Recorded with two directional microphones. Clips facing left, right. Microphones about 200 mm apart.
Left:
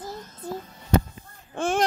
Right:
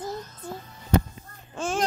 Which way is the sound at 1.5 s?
60° left (ahead or behind).